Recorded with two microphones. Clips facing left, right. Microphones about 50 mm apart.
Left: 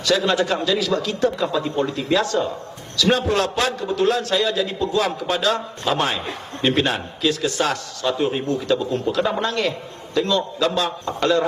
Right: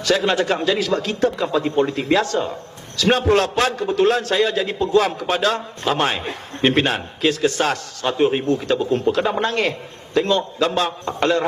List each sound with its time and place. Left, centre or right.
0.0 s a man's voice: right